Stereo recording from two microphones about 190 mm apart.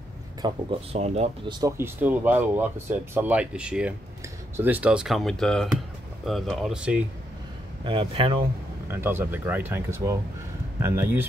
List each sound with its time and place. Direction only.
0.4 s speech: 30° right (ahead or behind)
1.5 s speech: 15° right (ahead or behind)
7.8 s speech: 25° right (ahead or behind)
8.8 s speech: 10° right (ahead or behind)